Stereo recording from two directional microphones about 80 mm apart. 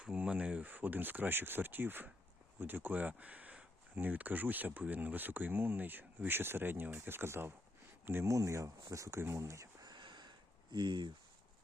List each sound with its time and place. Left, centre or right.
0.0 s speech: centre
8.3 s speech: right
9.8 s a sound: right